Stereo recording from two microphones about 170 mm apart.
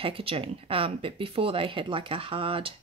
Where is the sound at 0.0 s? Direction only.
35° right (ahead or behind).